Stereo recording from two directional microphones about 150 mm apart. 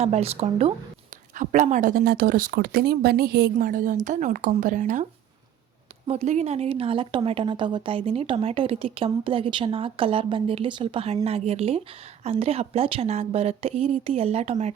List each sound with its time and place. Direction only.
0.0 s speech: 45° right (ahead or behind)
1.3 s speech: 55° right (ahead or behind)
6.1 s a woman's voice: 45° right (ahead or behind)